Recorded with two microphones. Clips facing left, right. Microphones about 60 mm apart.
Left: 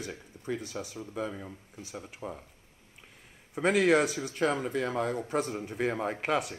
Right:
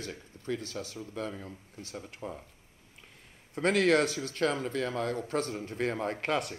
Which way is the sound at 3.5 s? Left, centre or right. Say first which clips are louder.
Left 1 dB; centre.